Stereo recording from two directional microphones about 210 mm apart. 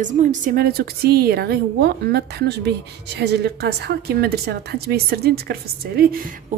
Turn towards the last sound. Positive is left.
turn(degrees=-50)  # may be behind; listen again after turning